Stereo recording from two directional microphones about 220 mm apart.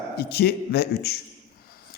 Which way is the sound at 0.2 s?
45° left (ahead or behind).